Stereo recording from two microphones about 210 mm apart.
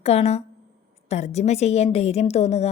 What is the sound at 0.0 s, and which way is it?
A woman's voice, 30° left (ahead or behind).